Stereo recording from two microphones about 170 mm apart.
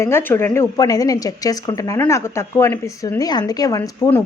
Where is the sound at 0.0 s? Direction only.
15° left (ahead or behind).